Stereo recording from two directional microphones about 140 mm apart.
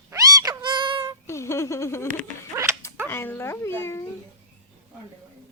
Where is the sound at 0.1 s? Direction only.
25° right (ahead or behind).